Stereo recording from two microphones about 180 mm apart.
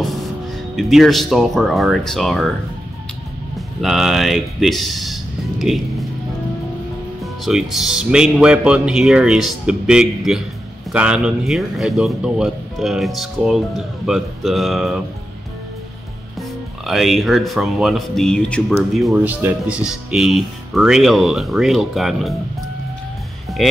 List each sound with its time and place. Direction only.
0.0 s music: centre (ahead or behind)
0.7 s speech: centre (ahead or behind)
3.5 s speech: centre (ahead or behind)
7.7 s speech: 5° right (ahead or behind)
16.3 s speech: centre (ahead or behind)
23.6 s speech: centre (ahead or behind)